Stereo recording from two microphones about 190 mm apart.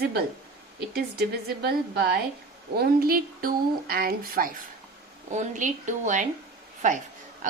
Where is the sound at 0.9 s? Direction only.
60° right (ahead or behind).